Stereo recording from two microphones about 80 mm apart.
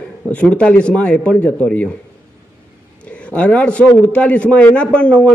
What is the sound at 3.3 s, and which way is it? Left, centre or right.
A man's voice, centre.